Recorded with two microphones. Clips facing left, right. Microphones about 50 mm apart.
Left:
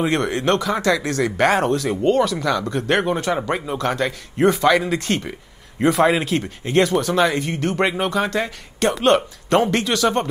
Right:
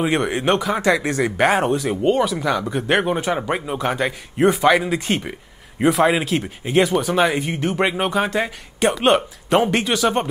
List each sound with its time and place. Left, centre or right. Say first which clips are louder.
0.0 s speech: even; centre